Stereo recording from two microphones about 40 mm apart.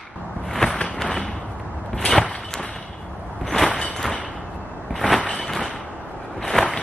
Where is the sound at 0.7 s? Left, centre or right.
Left.